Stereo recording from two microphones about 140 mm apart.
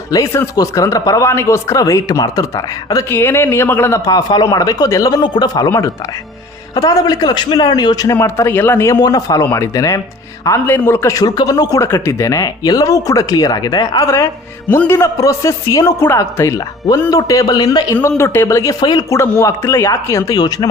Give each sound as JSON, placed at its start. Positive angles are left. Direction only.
{"t": 0.1, "sound": "a man's voice", "side_deg": 25}
{"t": 3.1, "sound": "a man's voice", "side_deg": 15}